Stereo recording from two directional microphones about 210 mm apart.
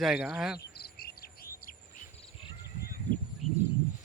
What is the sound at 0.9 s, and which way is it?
Chirp, 45° left (ahead or behind).